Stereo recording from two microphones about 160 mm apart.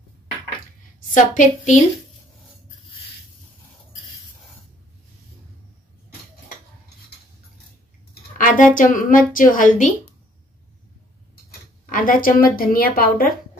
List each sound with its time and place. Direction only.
1.1 s a woman's voice: 50° left (ahead or behind)
8.1 s a woman's voice: 60° left (ahead or behind)
11.8 s a woman's voice: 60° left (ahead or behind)